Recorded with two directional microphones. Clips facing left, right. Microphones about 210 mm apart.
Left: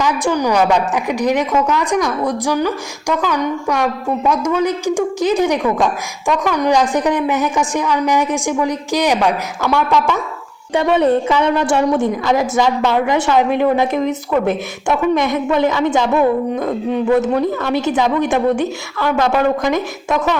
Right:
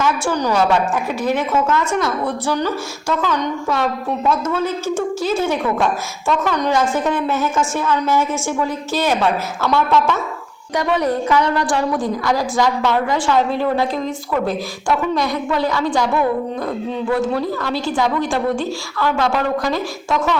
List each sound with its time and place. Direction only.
0.0 s a woman's voice: 15° left (ahead or behind)
10.8 s a woman's voice: 25° left (ahead or behind)